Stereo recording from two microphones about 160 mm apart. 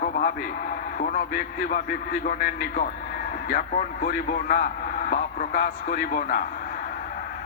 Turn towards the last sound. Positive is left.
turn(degrees=60)  # may be behind; listen again after turning